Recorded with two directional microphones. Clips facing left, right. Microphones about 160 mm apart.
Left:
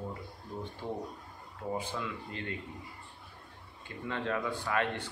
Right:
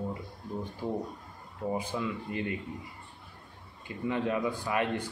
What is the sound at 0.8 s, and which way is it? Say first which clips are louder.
Speech: right 5 dB; 10° right (ahead or behind).